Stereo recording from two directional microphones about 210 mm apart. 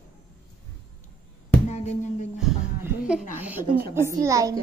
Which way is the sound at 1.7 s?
35° left (ahead or behind).